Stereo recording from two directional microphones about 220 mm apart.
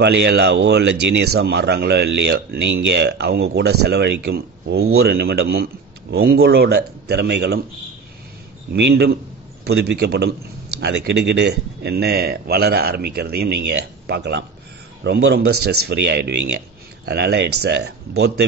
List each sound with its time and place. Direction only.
0.0 s speech: 50° right (ahead or behind)
8.7 s speech: 50° right (ahead or behind)